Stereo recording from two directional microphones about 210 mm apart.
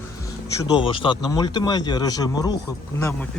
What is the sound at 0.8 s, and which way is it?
Speech, 25° left (ahead or behind).